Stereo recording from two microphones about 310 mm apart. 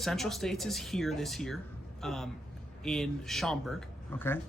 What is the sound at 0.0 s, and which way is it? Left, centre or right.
Speech, centre.